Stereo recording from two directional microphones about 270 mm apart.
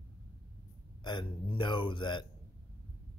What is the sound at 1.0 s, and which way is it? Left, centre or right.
Speech, centre.